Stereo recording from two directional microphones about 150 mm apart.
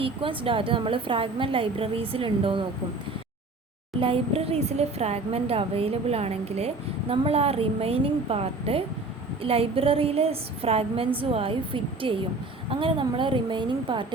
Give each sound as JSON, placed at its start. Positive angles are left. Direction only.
{"t": 0.0, "sound": "a woman's voice", "side_deg": -35}
{"t": 4.0, "sound": "a woman's voice", "side_deg": -40}